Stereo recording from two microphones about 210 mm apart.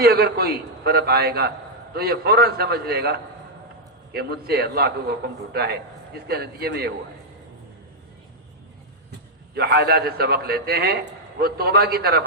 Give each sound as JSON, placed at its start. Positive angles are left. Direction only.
{"t": 0.0, "sound": "a man's voice", "side_deg": -50}
{"t": 9.6, "sound": "a man's voice", "side_deg": -50}